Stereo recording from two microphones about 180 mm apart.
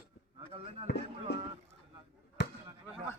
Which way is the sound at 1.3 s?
70° left (ahead or behind).